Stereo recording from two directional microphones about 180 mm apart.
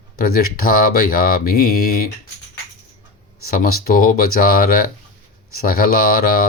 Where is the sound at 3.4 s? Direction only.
55° left (ahead or behind).